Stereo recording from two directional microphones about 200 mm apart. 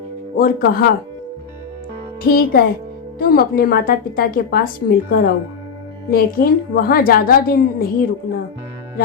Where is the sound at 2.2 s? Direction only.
50° left (ahead or behind).